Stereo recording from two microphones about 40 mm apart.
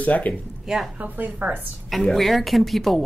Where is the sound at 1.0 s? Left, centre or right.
Right.